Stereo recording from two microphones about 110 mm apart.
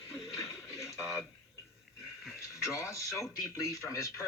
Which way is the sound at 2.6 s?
30° left (ahead or behind).